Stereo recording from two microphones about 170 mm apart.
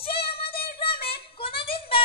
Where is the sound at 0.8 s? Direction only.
35° left (ahead or behind).